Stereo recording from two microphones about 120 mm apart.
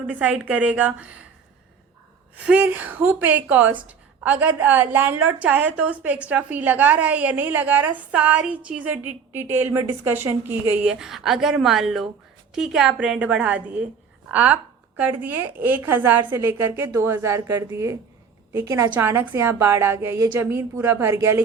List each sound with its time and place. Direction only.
0.1 s speech: 10° right (ahead or behind)
2.3 s speech: 10° right (ahead or behind)
11.0 s a woman's voice: 5° right (ahead or behind); by 21.4 s 20° right (ahead or behind)